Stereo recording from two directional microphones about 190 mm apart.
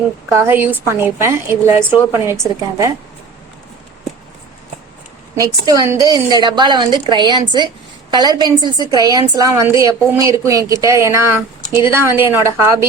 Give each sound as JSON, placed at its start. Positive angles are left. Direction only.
{"t": 0.3, "sound": "a woman's voice", "side_deg": -15}
{"t": 5.4, "sound": "a woman's voice", "side_deg": -15}